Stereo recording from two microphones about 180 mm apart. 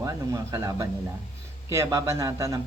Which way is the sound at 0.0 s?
20° right (ahead or behind).